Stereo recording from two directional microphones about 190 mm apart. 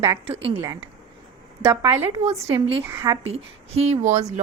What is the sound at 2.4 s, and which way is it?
Speech, 30° right (ahead or behind).